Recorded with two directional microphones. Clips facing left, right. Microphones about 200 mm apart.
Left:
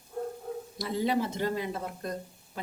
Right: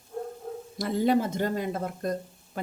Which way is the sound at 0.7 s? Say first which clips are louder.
Right 5 dB; 50° right (ahead or behind).